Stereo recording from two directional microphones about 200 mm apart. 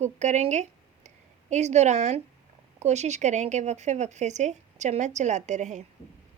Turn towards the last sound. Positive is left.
turn(degrees=-35)  # may be behind; listen again after turning